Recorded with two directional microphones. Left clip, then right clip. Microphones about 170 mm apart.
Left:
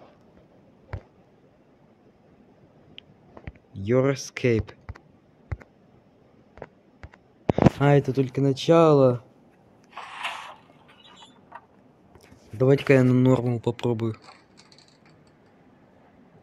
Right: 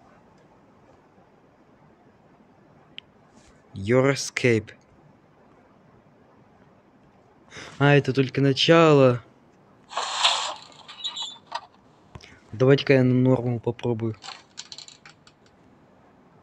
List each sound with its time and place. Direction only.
3.0 s a sound: 5° right (ahead or behind)
3.7 s speech: centre (ahead or behind)
7.5 s speech: 5° right (ahead or behind)
9.9 s a sound: 65° right (ahead or behind)
12.2 s speech: centre (ahead or behind)
14.2 s mechanisms: 45° right (ahead or behind)